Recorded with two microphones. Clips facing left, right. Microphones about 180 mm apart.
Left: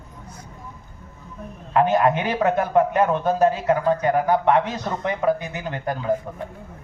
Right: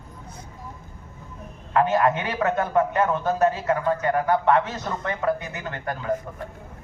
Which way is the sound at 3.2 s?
30° left (ahead or behind).